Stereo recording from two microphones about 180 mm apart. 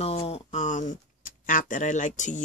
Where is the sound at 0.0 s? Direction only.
35° left (ahead or behind).